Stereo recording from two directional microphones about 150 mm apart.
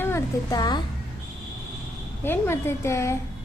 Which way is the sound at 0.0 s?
20° left (ahead or behind).